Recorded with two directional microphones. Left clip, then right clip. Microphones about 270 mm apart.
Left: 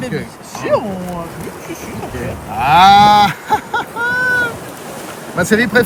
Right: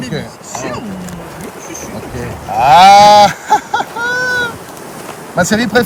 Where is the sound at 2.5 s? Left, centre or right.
Right.